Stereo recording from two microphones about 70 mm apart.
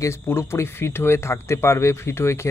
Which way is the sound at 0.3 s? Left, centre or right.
Left.